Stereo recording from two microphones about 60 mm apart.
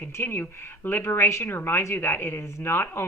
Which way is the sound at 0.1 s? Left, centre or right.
Left.